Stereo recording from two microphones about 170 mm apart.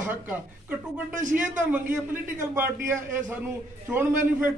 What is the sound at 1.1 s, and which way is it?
Speech, 45° right (ahead or behind).